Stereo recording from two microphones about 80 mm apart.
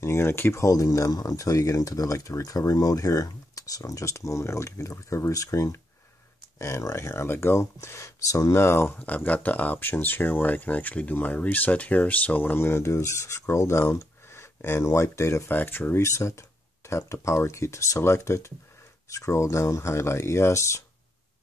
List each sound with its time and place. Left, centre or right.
0.0 s speech: left
9.0 s speech: centre; by 20.8 s left